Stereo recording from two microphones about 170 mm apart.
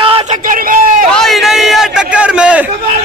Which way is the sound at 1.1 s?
Centre (ahead or behind).